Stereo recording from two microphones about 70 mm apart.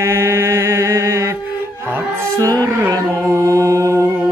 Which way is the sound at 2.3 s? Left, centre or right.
Right.